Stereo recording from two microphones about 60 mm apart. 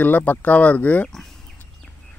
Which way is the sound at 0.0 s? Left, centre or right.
Left.